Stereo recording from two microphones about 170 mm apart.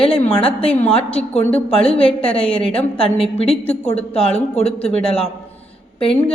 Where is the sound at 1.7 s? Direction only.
35° left (ahead or behind).